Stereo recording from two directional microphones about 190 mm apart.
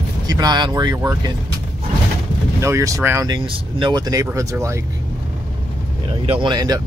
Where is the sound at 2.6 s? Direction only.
15° right (ahead or behind).